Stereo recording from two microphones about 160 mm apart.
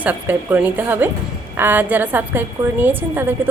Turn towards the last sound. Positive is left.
turn(degrees=-15)  # may be behind; listen again after turning